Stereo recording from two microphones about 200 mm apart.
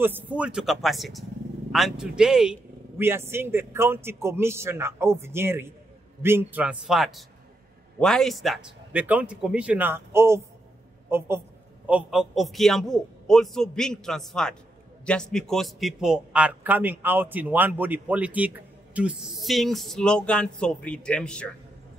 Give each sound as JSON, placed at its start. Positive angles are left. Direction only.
{"t": 0.0, "sound": "a man's voice", "side_deg": -10}